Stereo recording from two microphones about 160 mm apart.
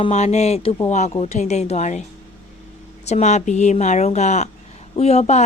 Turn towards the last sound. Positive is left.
turn(degrees=45)  # may be behind; listen again after turning